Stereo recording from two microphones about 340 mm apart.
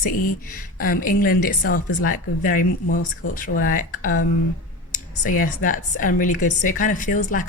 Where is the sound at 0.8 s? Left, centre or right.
Left.